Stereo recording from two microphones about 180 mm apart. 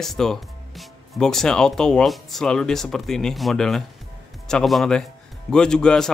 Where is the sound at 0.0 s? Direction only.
Centre (ahead or behind).